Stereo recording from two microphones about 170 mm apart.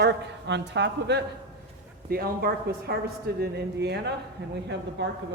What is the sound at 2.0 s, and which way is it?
Speech, 60° right (ahead or behind).